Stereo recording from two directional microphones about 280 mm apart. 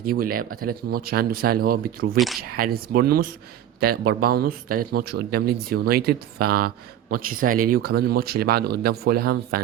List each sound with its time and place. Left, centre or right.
0.1 s speech: right
2.1 s speech: centre
2.6 s speech: right